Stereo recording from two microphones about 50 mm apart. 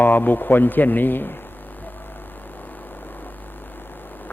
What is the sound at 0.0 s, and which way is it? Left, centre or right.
Speech, left.